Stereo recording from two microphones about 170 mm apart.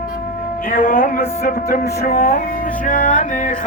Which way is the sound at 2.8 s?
50° left (ahead or behind).